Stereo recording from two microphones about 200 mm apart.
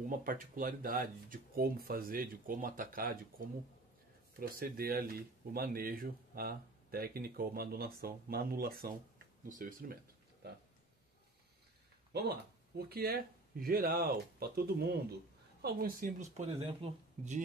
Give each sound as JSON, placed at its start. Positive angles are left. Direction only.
{"t": 0.1, "sound": "speech", "side_deg": -45}
{"t": 12.1, "sound": "speech", "side_deg": -50}